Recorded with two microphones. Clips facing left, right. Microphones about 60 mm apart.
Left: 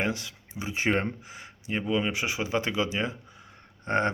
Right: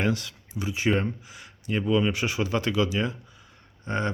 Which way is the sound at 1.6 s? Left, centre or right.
Centre.